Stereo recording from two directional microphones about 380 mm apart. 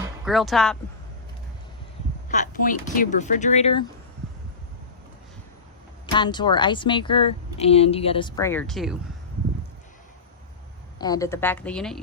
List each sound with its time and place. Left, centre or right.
0.3 s a woman's voice: centre
2.3 s speech: centre
6.1 s speech: centre
10.9 s a woman's voice: centre